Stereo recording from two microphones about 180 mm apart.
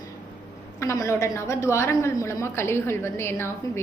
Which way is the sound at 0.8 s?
15° left (ahead or behind).